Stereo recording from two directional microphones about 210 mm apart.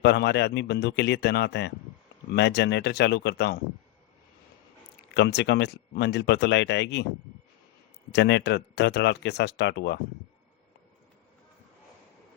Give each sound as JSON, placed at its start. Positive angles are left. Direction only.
{"t": 0.0, "sound": "speech", "side_deg": 55}
{"t": 5.1, "sound": "speech", "side_deg": 55}
{"t": 8.1, "sound": "speech", "side_deg": 55}